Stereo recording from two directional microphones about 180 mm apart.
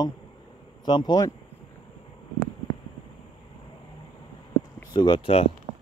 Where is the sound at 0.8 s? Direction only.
25° left (ahead or behind).